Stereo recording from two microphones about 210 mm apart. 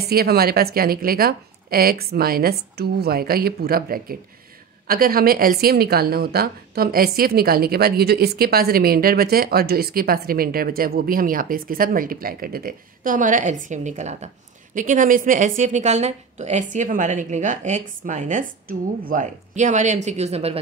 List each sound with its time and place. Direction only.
0.1 s a woman's voice: 45° right (ahead or behind); by 20.5 s 30° right (ahead or behind)